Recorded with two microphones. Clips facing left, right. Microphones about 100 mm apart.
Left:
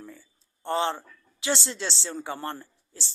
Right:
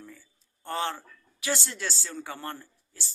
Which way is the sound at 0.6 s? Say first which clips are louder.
Left 5 dB; 25° left (ahead or behind).